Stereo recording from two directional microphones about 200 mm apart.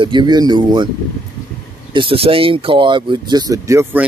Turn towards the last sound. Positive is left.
turn(degrees=-15)  # may be behind; listen again after turning